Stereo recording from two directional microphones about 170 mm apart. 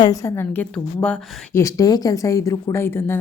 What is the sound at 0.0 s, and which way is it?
Speech, 20° left (ahead or behind).